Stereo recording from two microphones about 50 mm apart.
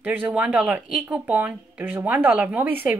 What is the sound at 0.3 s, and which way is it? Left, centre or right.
A woman's voice, right.